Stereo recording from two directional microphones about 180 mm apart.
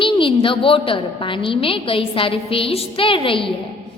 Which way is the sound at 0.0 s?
30° left (ahead or behind).